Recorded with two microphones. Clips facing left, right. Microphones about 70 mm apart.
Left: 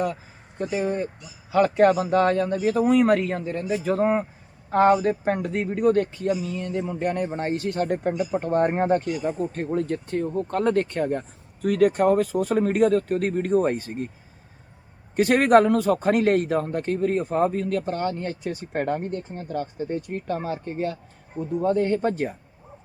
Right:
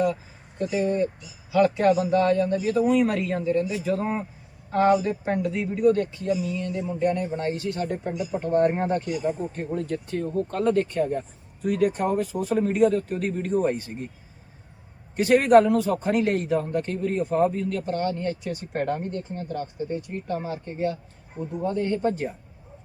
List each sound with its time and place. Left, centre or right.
0.6 s speech: left
0.9 s speech: left
1.2 s a man's voice: left
6.8 s a man's voice: left
8.7 s a man's voice: left
15.1 s a man's voice: left
17.8 s speech: left
19.3 s speech: left
19.5 s a man's voice: left